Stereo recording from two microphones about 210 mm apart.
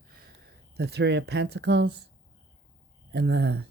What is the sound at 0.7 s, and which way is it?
Speech, 50° right (ahead or behind).